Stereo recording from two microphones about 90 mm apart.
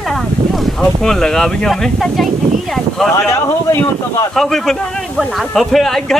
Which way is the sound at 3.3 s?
30° left (ahead or behind).